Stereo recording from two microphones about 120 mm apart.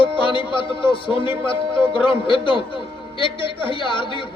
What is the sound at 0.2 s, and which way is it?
A man's voice, 45° left (ahead or behind).